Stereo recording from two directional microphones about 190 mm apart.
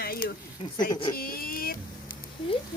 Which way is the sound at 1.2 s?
50° left (ahead or behind).